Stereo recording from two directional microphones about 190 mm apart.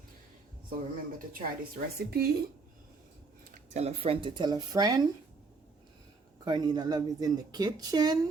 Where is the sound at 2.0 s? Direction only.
55° right (ahead or behind).